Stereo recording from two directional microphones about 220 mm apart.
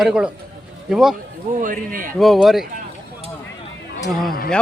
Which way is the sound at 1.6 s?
40° right (ahead or behind).